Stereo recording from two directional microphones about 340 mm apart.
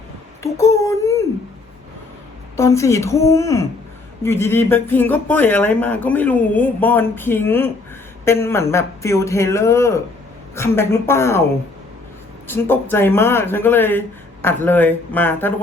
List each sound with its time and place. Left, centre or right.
0.4 s speech: centre
2.6 s speech: centre
12.5 s speech: centre